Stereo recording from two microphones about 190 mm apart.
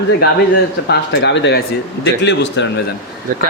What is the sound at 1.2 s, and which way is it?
A man's voice, 65° left (ahead or behind).